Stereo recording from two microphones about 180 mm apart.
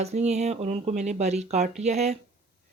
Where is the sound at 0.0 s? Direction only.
40° right (ahead or behind).